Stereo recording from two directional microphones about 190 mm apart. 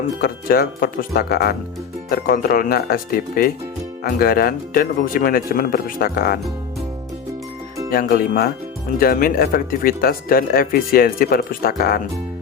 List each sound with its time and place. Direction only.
0.2 s speech: 55° left (ahead or behind)
7.9 s speech: 50° left (ahead or behind)